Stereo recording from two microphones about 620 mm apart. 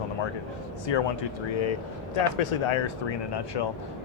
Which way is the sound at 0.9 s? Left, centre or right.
Left.